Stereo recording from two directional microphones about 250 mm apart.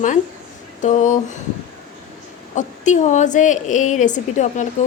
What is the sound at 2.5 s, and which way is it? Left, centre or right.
A woman's voice, left.